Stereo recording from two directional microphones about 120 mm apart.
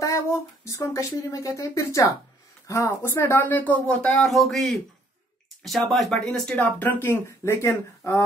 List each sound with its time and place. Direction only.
0.0 s speech: 25° left (ahead or behind); by 6.5 s 5° left (ahead or behind)
6.5 s speech: 15° left (ahead or behind)